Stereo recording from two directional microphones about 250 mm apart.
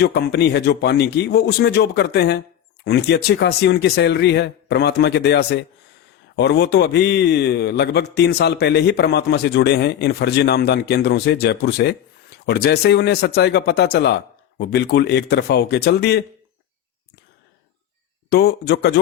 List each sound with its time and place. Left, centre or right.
0.0 s a man's voice: left
18.3 s a man's voice: left